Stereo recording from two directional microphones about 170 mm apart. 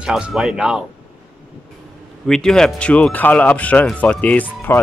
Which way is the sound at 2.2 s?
5° left (ahead or behind).